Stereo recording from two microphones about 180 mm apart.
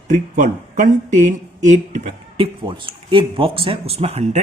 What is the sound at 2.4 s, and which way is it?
Speech, 30° right (ahead or behind).